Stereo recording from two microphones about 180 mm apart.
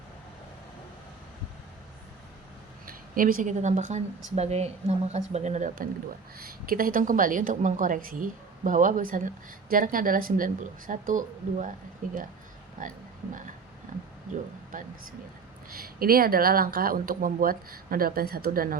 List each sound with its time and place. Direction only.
2.8 s a woman's voice: 50° right (ahead or behind)
15.7 s speech: 55° right (ahead or behind)